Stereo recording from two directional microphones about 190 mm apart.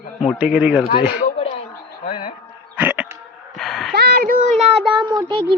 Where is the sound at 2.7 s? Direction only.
10° right (ahead or behind).